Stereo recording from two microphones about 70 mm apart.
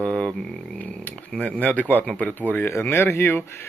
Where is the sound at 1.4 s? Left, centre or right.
Centre.